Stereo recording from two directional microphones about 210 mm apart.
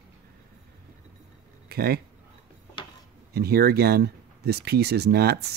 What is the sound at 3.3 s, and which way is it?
Speech, 50° right (ahead or behind).